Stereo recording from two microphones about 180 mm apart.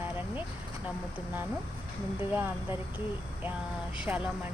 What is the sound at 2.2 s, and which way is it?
Speech, 10° right (ahead or behind).